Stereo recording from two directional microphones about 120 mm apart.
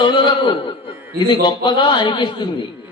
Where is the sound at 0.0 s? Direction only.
35° left (ahead or behind).